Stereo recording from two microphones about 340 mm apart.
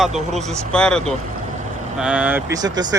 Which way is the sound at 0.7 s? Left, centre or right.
Centre.